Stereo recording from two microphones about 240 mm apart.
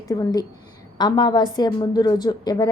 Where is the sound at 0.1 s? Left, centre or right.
Centre.